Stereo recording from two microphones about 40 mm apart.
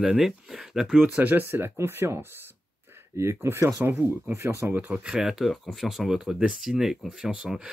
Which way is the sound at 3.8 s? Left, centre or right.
Right.